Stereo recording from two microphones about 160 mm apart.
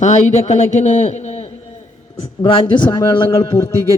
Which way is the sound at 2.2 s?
35° left (ahead or behind).